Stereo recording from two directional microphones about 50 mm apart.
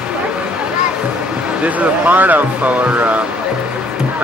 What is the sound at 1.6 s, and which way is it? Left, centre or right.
Speech, right.